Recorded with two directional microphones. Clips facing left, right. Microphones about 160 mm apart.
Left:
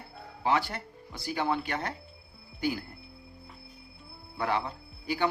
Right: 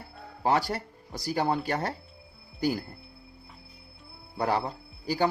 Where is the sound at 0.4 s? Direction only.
40° right (ahead or behind).